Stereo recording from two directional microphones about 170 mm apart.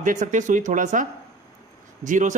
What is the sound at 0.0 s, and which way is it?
A man's voice, 50° right (ahead or behind).